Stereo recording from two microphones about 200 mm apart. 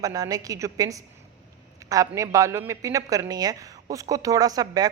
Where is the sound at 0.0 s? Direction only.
15° right (ahead or behind).